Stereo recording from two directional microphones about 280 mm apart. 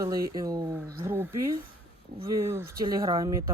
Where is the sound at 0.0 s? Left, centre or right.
Centre.